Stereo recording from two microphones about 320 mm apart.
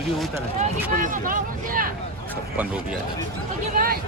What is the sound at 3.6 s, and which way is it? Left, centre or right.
Speech, right.